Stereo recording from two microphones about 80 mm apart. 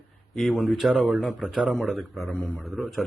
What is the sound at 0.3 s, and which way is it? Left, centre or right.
A man's voice, centre.